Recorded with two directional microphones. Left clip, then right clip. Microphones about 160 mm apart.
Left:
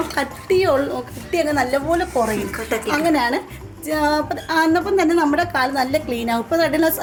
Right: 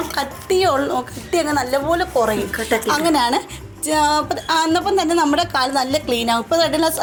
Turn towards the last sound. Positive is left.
turn(degrees=0)  # may be behind; listen again after turning